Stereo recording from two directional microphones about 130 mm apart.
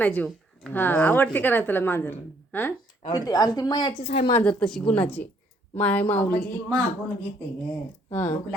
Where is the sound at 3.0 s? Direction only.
30° left (ahead or behind).